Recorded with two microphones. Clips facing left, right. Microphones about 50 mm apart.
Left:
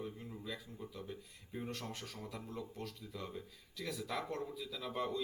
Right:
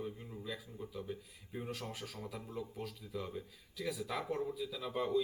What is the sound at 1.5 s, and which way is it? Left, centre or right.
Speech, centre.